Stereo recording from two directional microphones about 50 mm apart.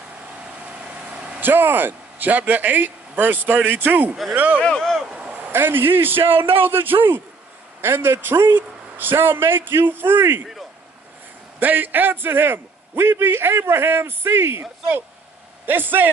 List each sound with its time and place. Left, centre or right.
0.4 s vehicle: right
1.4 s a man's voice: right
4.6 s speech: centre
5.5 s a man's voice: right
11.6 s a man's voice: right
15.6 s a man's voice: right